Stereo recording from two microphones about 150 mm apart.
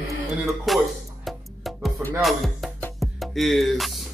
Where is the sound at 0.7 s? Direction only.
Centre (ahead or behind).